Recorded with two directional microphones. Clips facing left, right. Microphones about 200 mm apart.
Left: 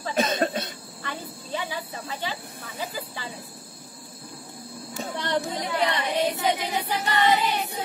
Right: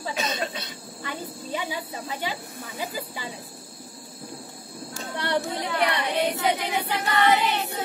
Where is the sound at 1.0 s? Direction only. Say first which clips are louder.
Right 2 dB; 15° right (ahead or behind).